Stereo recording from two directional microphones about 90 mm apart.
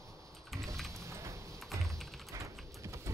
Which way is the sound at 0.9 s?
35° right (ahead or behind).